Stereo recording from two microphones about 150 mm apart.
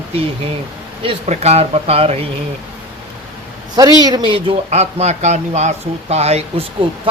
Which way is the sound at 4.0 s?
25° right (ahead or behind).